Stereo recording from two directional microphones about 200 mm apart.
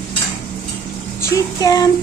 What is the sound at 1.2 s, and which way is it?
Music, 15° left (ahead or behind).